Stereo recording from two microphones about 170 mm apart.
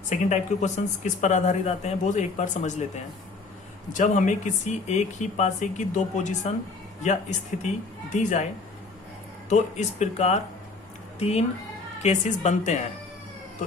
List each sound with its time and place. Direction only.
0.1 s speech: 45° left (ahead or behind)
9.5 s speech: 45° left (ahead or behind)